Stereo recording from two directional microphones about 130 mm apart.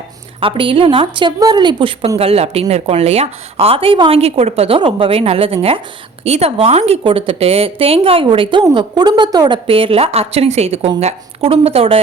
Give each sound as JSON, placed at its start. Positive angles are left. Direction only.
{"t": 0.3, "sound": "a woman's voice", "side_deg": -40}
{"t": 2.1, "sound": "a woman's voice", "side_deg": -50}
{"t": 9.6, "sound": "a woman's voice", "side_deg": -45}